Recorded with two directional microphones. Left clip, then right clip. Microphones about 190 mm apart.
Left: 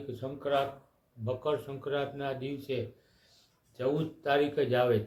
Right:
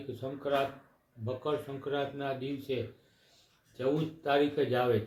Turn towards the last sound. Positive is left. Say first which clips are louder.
# left 1 dB
turn(degrees=0)  # may be behind; listen again after turning